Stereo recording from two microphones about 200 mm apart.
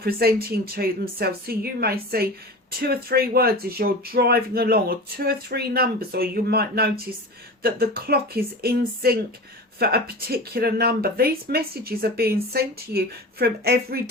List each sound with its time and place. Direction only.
0.0 s speech: 50° right (ahead or behind)